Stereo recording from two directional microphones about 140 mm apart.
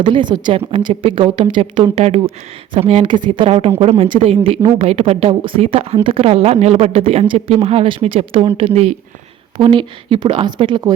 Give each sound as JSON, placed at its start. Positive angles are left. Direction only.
{"t": 0.0, "sound": "a woman's voice", "side_deg": -35}
{"t": 9.6, "sound": "a woman's voice", "side_deg": -35}